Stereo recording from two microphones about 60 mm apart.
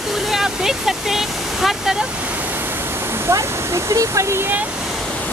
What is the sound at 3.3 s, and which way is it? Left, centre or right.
Speech, right.